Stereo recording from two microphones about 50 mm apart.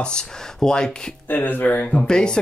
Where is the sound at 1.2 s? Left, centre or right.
Left.